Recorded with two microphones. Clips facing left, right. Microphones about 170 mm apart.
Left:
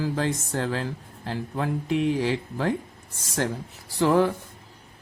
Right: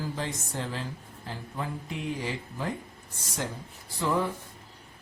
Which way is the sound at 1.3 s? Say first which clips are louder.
Left 8 dB; 75° left (ahead or behind).